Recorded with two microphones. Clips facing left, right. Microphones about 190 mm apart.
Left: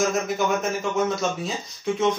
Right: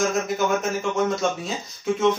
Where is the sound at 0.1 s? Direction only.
Centre (ahead or behind).